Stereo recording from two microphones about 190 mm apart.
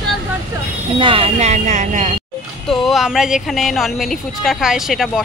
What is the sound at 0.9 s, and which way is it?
Speech, 30° right (ahead or behind).